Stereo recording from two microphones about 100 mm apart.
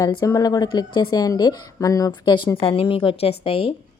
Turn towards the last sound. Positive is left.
turn(degrees=70)  # may be behind; listen again after turning